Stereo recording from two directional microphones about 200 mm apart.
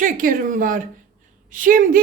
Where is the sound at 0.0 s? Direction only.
45° right (ahead or behind).